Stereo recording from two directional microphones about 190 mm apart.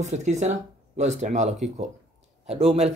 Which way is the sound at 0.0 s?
40° right (ahead or behind).